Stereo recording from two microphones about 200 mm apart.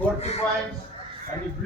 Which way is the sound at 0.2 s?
30° left (ahead or behind).